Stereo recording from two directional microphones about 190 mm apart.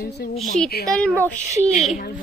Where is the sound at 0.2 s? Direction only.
55° left (ahead or behind).